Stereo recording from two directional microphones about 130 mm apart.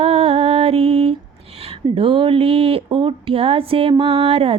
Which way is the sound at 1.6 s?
45° right (ahead or behind).